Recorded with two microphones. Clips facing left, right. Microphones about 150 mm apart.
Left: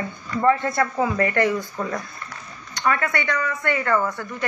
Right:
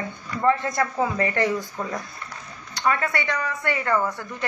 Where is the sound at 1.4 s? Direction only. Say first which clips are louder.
Left 2 dB; 15° right (ahead or behind).